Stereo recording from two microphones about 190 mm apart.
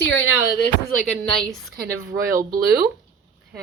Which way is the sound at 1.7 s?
50° right (ahead or behind).